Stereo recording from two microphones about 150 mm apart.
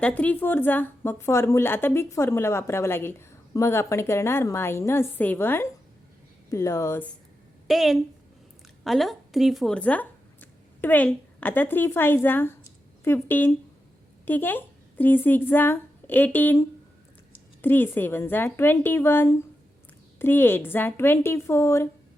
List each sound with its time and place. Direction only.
0.0 s speech: 10° left (ahead or behind)
7.7 s a woman's voice: centre (ahead or behind); by 21.8 s 20° left (ahead or behind)